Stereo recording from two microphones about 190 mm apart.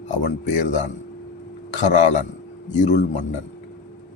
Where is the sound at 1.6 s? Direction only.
40° left (ahead or behind).